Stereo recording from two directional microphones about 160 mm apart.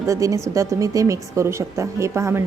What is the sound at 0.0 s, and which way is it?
A woman's voice, 20° right (ahead or behind).